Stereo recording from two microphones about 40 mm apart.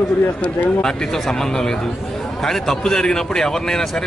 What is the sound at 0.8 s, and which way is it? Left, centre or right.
Speech, centre.